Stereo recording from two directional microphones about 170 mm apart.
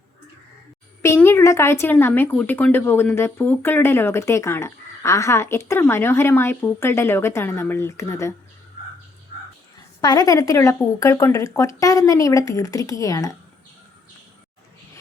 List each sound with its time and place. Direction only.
1.0 s speech: 15° left (ahead or behind)
10.0 s speech: 20° left (ahead or behind)